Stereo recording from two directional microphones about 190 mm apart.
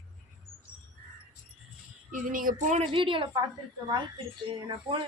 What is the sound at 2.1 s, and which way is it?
Speech, 45° right (ahead or behind).